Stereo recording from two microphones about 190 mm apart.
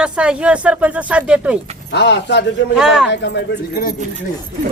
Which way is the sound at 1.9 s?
65° left (ahead or behind).